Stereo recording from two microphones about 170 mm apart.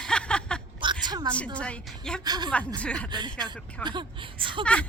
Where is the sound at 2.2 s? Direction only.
25° right (ahead or behind).